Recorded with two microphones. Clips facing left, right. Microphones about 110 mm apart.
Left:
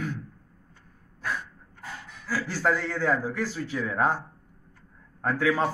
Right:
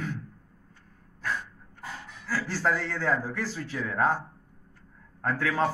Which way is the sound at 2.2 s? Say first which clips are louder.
Left 2 dB; 5° left (ahead or behind).